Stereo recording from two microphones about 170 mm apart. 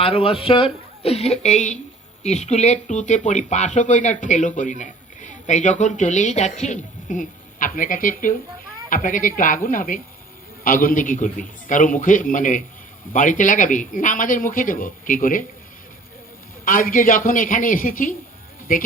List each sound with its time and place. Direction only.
0.0 s speech: 35° left (ahead or behind); by 15.4 s 55° left (ahead or behind)
16.6 s a man's voice: 55° left (ahead or behind)